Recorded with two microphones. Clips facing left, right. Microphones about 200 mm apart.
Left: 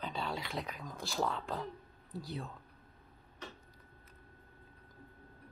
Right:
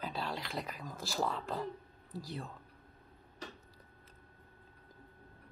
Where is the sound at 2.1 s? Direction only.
Centre (ahead or behind).